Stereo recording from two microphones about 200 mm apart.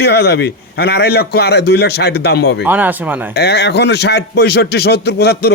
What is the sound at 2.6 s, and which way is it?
Speech, 10° right (ahead or behind).